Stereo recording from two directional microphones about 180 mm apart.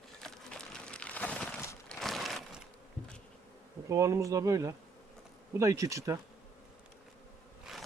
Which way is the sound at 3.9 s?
15° right (ahead or behind).